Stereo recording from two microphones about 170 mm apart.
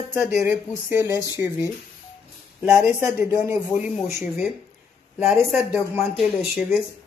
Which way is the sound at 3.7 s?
5° right (ahead or behind).